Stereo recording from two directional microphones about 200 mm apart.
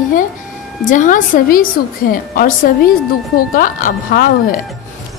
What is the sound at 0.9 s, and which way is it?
A woman's voice, 40° left (ahead or behind).